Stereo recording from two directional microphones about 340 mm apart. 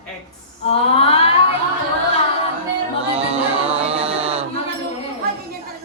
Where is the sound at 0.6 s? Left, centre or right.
Centre.